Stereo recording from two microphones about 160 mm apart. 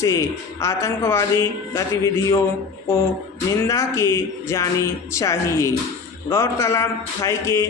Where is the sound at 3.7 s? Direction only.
20° left (ahead or behind).